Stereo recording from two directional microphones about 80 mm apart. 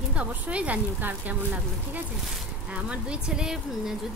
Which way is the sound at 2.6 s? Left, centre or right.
Centre.